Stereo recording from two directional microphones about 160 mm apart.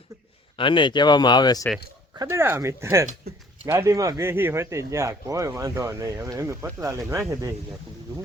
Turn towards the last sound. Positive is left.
turn(degrees=-20)  # may be behind; listen again after turning